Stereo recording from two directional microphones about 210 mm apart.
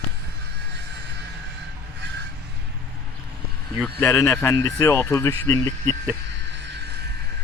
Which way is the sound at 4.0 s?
10° left (ahead or behind).